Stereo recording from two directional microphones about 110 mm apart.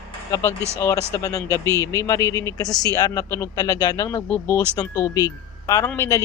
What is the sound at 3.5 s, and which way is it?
Speech, 35° left (ahead or behind).